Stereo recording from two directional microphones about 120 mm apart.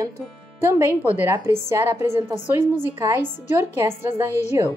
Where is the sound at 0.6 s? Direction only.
20° right (ahead or behind).